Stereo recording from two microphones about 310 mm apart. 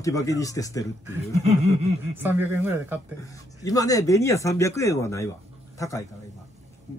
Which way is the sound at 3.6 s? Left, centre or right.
Centre.